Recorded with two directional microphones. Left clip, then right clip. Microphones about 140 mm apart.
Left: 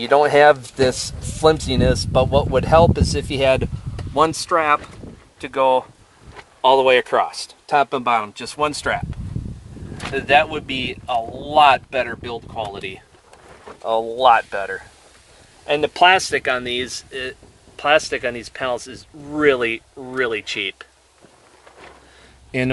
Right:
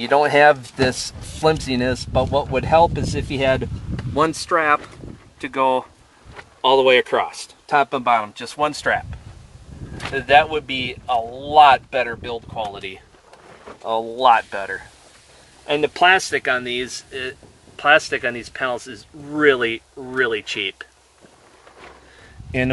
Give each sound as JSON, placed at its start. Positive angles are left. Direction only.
{"t": 0.1, "sound": "speech", "side_deg": 25}
{"t": 2.1, "sound": "speech", "side_deg": 25}
{"t": 10.1, "sound": "speech", "side_deg": 40}
{"t": 13.8, "sound": "speech", "side_deg": 20}